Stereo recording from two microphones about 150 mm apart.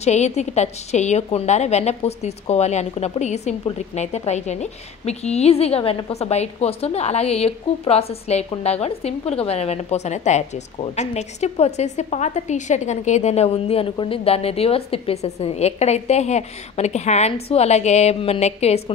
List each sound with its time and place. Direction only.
0.0 s a woman's voice: 50° left (ahead or behind)